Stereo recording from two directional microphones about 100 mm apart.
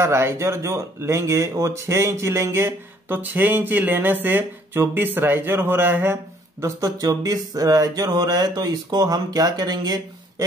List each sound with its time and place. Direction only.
0.0 s speech: 25° right (ahead or behind)
6.6 s speech: 35° right (ahead or behind)